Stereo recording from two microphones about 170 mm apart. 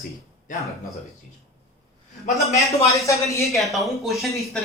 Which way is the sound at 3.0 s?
20° left (ahead or behind).